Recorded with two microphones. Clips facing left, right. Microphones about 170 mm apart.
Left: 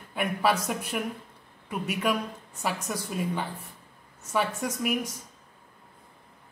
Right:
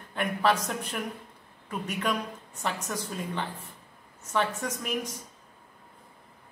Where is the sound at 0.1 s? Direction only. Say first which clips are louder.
Even; 10° left (ahead or behind).